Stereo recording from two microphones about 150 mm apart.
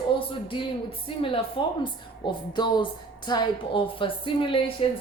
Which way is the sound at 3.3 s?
30° left (ahead or behind).